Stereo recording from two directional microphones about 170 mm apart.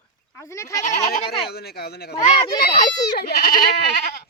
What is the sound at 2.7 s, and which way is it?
Speech, 20° left (ahead or behind).